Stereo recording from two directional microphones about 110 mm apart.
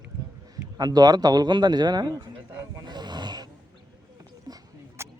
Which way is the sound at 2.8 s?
40° right (ahead or behind).